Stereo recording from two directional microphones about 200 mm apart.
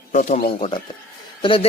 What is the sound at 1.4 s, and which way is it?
Speech, 25° left (ahead or behind).